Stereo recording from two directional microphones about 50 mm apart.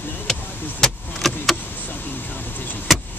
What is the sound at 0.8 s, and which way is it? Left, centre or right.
Vehicle, centre.